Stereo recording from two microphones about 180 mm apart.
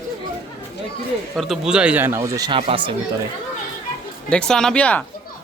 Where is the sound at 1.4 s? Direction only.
Centre (ahead or behind); by 2.9 s 30° right (ahead or behind).